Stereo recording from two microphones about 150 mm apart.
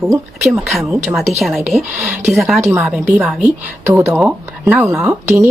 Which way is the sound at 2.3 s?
Centre (ahead or behind).